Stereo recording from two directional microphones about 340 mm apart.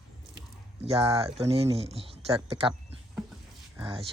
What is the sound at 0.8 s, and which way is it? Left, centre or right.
Speech, centre.